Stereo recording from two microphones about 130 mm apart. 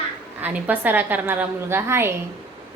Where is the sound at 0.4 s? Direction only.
15° right (ahead or behind).